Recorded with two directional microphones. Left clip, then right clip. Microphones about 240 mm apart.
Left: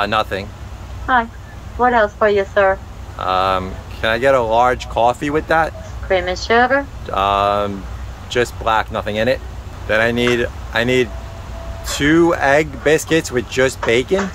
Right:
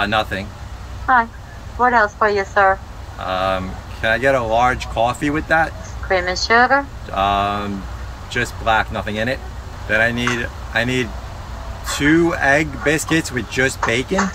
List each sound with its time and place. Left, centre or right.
0.0 s speech: centre
1.8 s speech: left